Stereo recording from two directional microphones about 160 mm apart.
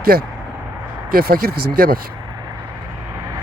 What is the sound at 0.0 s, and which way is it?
Speech, 70° right (ahead or behind).